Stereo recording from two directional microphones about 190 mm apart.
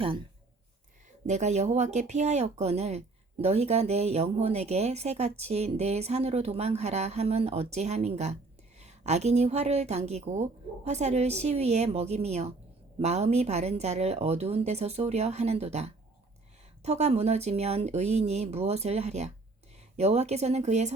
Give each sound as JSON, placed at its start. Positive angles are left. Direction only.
{"t": 1.3, "sound": "speech", "side_deg": -35}